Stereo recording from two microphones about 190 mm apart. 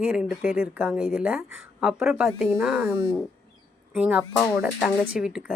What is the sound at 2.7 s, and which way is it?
Speech, 15° right (ahead or behind).